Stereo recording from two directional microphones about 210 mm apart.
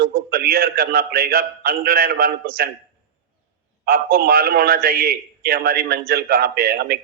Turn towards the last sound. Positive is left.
turn(degrees=-45)  # may be behind; listen again after turning